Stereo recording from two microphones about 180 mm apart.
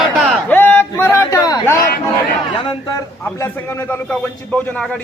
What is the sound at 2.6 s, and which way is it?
A man's voice, 20° left (ahead or behind).